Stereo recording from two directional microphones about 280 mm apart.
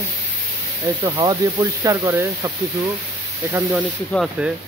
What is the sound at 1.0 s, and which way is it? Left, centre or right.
Speech, centre.